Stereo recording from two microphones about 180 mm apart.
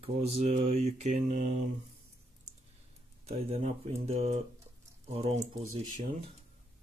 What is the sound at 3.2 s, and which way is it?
Speech, 35° right (ahead or behind).